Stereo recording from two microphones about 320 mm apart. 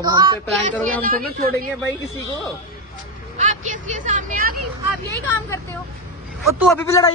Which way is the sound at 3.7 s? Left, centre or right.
Right.